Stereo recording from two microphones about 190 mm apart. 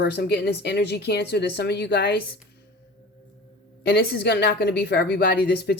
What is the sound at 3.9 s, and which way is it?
Speech, 60° left (ahead or behind).